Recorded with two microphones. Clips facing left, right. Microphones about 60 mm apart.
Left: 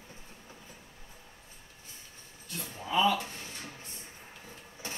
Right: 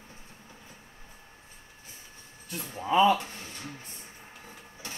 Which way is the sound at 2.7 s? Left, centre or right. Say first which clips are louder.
Right 5 dB; right.